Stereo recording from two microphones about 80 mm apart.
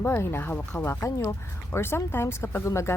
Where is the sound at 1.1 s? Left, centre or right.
Left.